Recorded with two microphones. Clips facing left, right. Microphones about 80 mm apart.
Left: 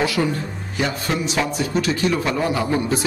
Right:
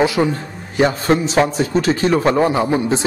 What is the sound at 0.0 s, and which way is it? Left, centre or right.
Speech, right.